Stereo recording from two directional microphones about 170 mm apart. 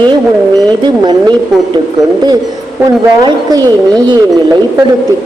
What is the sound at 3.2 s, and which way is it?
Speech, 25° right (ahead or behind).